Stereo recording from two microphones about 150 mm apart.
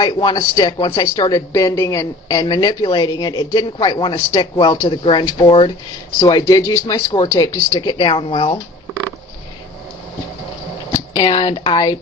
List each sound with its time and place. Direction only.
0.0 s a man's voice: 30° left (ahead or behind)
6.2 s speech: 25° left (ahead or behind)
11.2 s a man's voice: 30° left (ahead or behind)